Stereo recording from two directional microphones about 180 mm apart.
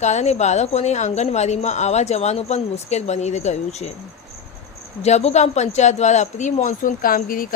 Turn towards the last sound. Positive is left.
turn(degrees=50)  # may be behind; listen again after turning